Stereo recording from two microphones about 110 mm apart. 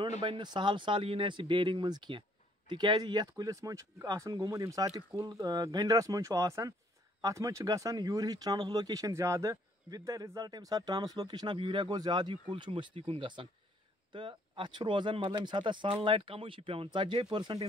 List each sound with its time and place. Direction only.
0.2 s speech: 45° right (ahead or behind)